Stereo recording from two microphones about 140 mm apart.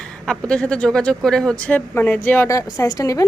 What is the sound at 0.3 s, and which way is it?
A woman's voice, 5° left (ahead or behind).